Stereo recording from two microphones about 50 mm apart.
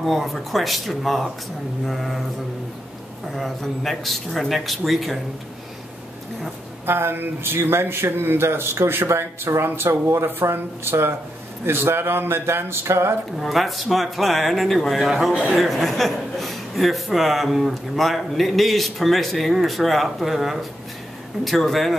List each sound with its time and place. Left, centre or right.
0.0 s a man's voice: centre
3.3 s a man's voice: centre
6.9 s speech: right
10.5 s speech: right
13.4 s a man's voice: centre